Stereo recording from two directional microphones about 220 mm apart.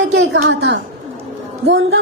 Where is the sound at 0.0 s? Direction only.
50° right (ahead or behind).